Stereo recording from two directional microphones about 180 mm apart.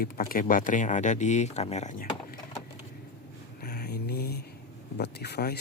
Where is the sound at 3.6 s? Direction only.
60° left (ahead or behind).